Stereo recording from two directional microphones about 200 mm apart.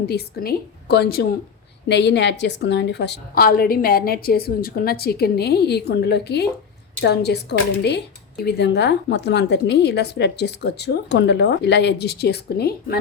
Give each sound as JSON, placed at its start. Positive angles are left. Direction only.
{"t": 0.1, "sound": "a woman's voice", "side_deg": 50}